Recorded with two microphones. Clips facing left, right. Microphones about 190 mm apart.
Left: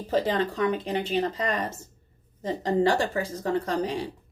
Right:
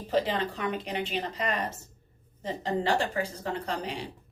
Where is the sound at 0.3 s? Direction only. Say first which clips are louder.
Left 6 dB; 40° left (ahead or behind).